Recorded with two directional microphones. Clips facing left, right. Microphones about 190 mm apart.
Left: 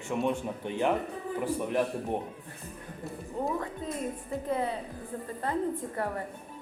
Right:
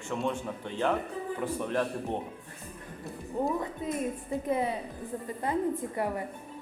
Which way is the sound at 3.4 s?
15° right (ahead or behind).